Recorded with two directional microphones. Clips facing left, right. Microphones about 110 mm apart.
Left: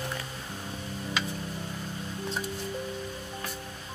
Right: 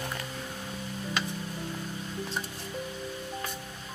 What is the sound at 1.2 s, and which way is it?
Music, centre (ahead or behind).